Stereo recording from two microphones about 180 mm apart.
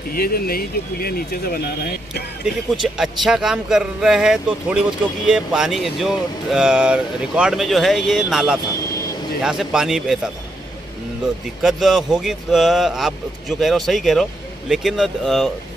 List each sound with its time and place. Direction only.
0.1 s speech: 55° left (ahead or behind)
2.4 s speech: centre (ahead or behind)
11.6 s speech: centre (ahead or behind)